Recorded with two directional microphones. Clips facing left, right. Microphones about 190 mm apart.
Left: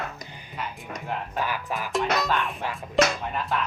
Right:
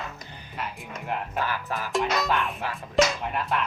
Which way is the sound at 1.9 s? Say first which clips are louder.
Even; centre (ahead or behind).